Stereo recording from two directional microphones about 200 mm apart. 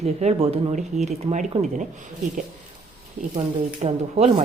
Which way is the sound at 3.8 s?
30° right (ahead or behind).